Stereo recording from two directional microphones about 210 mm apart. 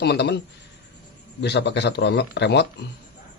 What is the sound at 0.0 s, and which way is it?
Speech, 50° left (ahead or behind).